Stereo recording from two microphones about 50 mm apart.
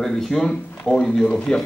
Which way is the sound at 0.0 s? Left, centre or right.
Centre.